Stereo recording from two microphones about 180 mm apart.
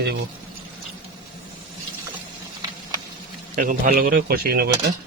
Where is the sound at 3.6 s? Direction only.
50° right (ahead or behind).